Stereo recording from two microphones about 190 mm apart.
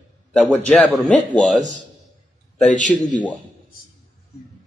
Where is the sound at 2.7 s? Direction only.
40° left (ahead or behind).